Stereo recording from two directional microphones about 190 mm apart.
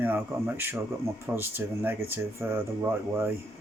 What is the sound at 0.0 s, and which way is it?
Speech, 10° right (ahead or behind).